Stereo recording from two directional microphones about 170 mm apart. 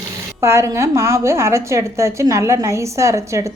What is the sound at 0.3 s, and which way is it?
A woman's voice, 15° right (ahead or behind).